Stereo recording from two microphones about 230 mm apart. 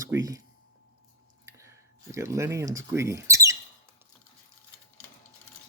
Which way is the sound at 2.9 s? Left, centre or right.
Centre.